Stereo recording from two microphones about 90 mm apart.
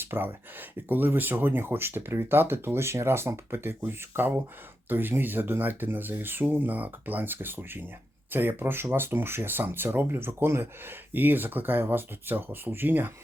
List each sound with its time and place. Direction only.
0.0 s speech: 25° right (ahead or behind)